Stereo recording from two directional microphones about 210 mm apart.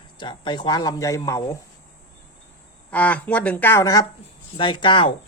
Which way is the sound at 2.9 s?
5° left (ahead or behind).